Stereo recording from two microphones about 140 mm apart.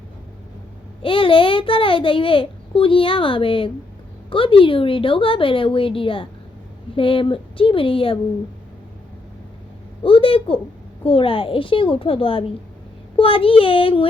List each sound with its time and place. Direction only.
1.0 s a child's voice: 40° left (ahead or behind)
10.0 s a child's voice: 40° left (ahead or behind)